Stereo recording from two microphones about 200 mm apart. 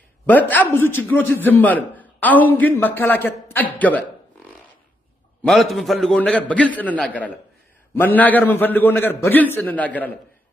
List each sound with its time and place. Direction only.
0.3 s a man's voice: 10° left (ahead or behind)
5.5 s a man's voice: centre (ahead or behind)